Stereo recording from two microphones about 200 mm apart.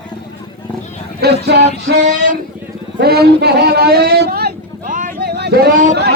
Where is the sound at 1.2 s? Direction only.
55° right (ahead or behind).